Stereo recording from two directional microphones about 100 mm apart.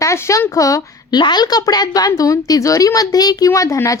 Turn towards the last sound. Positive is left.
turn(degrees=35)  # may be behind; listen again after turning